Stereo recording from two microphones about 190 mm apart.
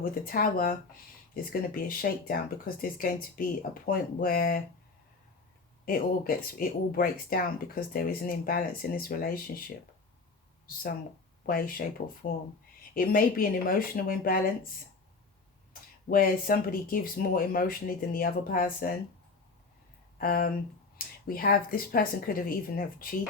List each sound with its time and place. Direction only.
0.0 s speech: 50° left (ahead or behind)
5.8 s speech: 50° left (ahead or behind)
11.4 s speech: 50° left (ahead or behind)
15.7 s speech: 50° left (ahead or behind)
20.1 s speech: 50° left (ahead or behind)